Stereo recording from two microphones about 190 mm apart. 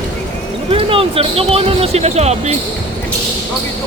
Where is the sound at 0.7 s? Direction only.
30° right (ahead or behind).